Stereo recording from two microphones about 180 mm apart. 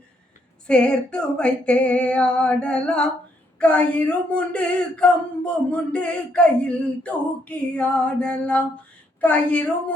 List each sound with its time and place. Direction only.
0.7 s speech: 5° left (ahead or behind)